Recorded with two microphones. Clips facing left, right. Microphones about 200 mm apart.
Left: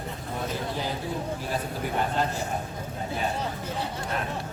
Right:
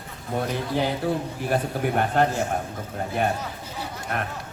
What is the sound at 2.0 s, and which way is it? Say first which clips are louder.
Speech: right 5 dB; 60° right (ahead or behind).